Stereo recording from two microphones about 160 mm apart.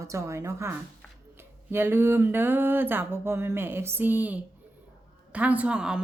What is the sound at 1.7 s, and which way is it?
A woman's voice, 15° right (ahead or behind).